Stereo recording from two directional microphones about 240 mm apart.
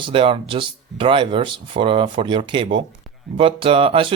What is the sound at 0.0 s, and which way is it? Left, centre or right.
Speech, right.